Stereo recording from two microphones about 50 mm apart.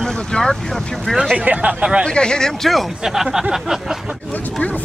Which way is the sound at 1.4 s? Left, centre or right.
Right.